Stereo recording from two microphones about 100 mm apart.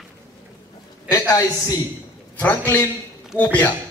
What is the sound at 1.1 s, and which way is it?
Speech, 35° left (ahead or behind).